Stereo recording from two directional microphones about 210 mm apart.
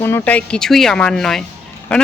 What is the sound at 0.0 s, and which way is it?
Speech, 10° left (ahead or behind).